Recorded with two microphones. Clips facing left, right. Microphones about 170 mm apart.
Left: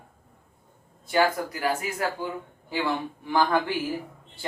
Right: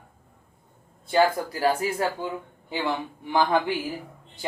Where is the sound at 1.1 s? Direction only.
30° right (ahead or behind).